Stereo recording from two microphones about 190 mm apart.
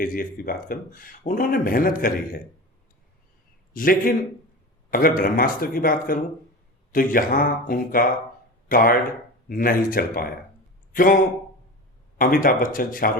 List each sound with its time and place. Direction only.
0.0 s speech: 45° left (ahead or behind)
3.7 s a man's voice: 45° left (ahead or behind)